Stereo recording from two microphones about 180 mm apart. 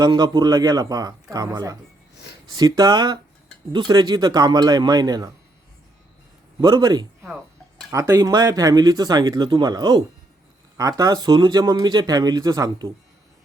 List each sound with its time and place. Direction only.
0.0 s speech: 20° right (ahead or behind)
6.6 s a man's voice: 20° right (ahead or behind)